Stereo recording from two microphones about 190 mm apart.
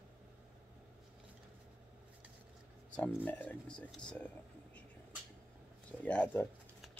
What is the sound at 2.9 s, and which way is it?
Speech, 5° left (ahead or behind).